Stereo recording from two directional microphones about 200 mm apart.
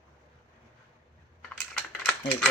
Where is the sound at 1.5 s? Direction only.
5° left (ahead or behind).